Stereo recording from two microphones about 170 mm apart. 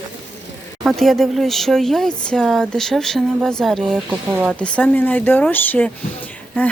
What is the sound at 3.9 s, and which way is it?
Speech, 10° right (ahead or behind).